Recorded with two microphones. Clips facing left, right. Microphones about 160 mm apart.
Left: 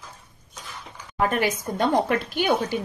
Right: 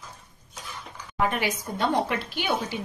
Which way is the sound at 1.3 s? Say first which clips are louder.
Left 4 dB; 50° left (ahead or behind).